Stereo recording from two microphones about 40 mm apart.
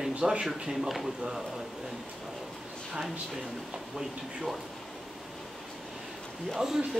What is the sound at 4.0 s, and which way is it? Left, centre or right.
Speech, centre.